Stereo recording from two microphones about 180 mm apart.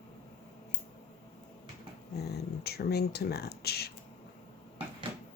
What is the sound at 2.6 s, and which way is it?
Speech, 60° left (ahead or behind).